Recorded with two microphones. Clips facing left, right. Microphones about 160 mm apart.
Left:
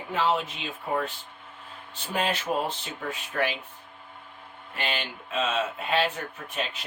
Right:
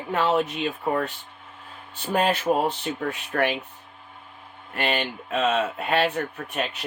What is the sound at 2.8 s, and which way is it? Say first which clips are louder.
Speech: right 6 dB; 60° right (ahead or behind).